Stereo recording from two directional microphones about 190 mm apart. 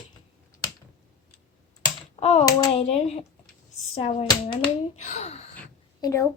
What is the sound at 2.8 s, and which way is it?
Speech, 35° left (ahead or behind).